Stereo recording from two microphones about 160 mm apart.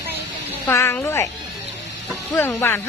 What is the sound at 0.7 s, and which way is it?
Speech, 15° left (ahead or behind).